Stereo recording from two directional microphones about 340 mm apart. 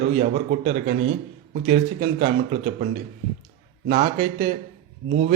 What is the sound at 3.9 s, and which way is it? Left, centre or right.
A man's voice, right.